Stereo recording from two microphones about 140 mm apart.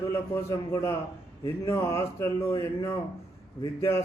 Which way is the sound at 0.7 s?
20° left (ahead or behind).